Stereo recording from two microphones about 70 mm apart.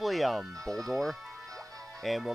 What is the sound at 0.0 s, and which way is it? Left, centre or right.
Speech, centre.